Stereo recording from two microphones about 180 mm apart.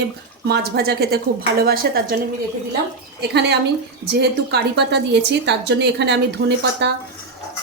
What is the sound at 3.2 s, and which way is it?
A woman's voice, 65° right (ahead or behind).